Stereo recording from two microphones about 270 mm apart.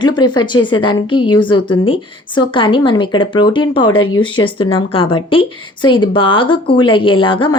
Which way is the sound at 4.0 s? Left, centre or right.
Left.